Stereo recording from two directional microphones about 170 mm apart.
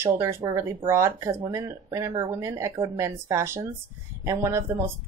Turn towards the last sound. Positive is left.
turn(degrees=-15)  # may be behind; listen again after turning